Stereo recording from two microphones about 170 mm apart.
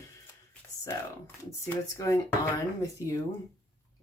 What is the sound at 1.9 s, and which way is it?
Speech, 20° left (ahead or behind).